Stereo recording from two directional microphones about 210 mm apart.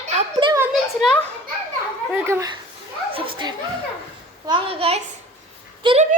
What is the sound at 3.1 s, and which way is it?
Chuckle, 25° right (ahead or behind).